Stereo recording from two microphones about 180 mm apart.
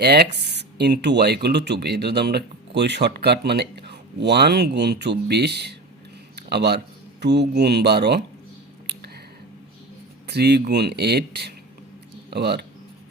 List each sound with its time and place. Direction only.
0.0 s speech: 65° right (ahead or behind)
10.2 s speech: 65° right (ahead or behind)